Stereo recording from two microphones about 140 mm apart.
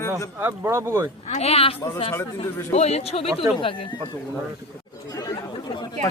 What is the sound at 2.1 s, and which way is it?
Speech, 20° left (ahead or behind).